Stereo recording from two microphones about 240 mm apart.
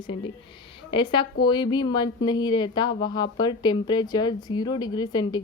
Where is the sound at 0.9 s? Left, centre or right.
Centre.